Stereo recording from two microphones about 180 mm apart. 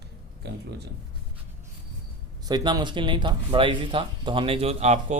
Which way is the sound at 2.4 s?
20° right (ahead or behind).